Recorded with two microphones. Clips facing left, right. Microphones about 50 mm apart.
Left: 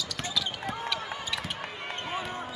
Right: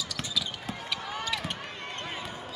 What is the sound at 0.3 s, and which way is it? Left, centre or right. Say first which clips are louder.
Basketball bounce: left 3 dB; centre.